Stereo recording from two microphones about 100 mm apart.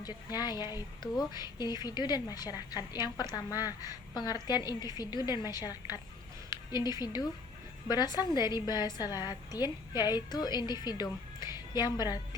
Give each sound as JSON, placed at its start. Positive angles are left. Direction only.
{"t": 0.0, "sound": "a woman's voice", "side_deg": 45}